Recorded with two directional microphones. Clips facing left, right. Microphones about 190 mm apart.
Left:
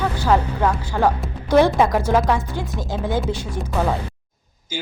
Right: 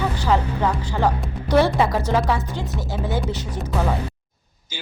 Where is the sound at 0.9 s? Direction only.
10° left (ahead or behind).